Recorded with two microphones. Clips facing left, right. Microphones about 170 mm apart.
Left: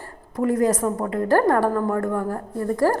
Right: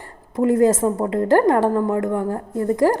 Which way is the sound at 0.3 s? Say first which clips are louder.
Right 4 dB; 25° right (ahead or behind).